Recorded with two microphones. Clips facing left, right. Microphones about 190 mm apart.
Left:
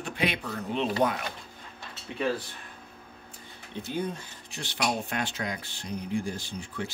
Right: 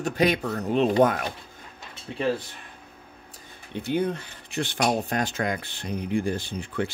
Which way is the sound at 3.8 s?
65° right (ahead or behind).